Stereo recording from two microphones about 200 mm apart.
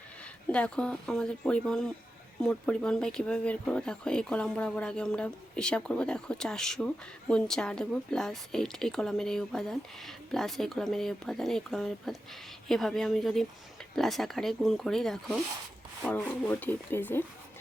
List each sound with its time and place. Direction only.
0.5 s speech: 5° left (ahead or behind)